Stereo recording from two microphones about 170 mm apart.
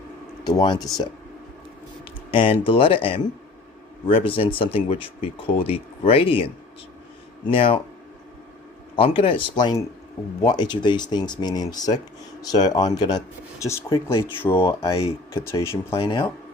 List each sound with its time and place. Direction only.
0.4 s speech: 25° left (ahead or behind)
2.3 s speech: 30° left (ahead or behind)
9.0 s speech: 30° left (ahead or behind); by 16.0 s 15° left (ahead or behind)
16.0 s speech: 30° left (ahead or behind)